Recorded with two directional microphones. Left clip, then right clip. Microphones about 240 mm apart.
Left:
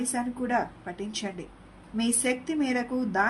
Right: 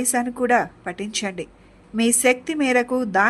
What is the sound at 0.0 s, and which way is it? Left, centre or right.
Speech, right.